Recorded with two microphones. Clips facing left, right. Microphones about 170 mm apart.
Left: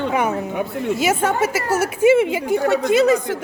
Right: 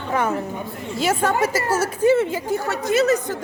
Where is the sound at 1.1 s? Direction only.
5° left (ahead or behind).